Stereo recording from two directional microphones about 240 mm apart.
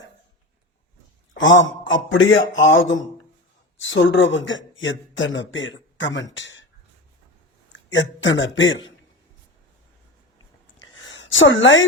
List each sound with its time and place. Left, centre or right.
1.4 s a man's voice: left
7.9 s a man's voice: left
10.8 s a sound: left